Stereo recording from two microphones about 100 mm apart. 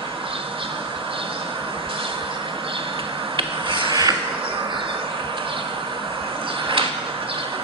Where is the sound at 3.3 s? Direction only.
60° right (ahead or behind).